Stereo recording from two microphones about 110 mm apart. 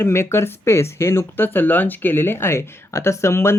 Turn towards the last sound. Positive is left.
turn(degrees=25)  # may be behind; listen again after turning